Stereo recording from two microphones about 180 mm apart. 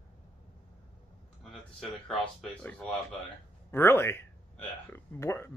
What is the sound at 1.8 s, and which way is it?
Speech, centre (ahead or behind).